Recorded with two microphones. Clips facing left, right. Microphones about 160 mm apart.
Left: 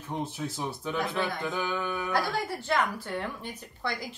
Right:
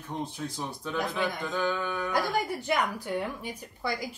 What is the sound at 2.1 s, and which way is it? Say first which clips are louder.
A woman's voice: right 2 dB; 15° right (ahead or behind).